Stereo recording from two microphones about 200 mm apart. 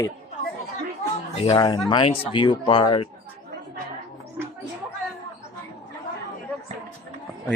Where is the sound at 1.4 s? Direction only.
25° left (ahead or behind).